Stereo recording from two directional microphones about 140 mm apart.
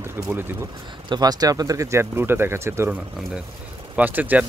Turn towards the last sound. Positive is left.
turn(degrees=-10)  # may be behind; listen again after turning